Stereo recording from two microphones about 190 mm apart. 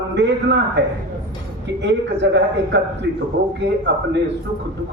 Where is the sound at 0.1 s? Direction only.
65° right (ahead or behind).